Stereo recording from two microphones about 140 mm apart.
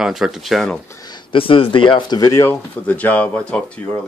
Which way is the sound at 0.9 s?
30° left (ahead or behind).